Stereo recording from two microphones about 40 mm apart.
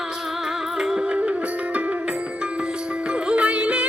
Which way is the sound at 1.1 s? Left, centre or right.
Right.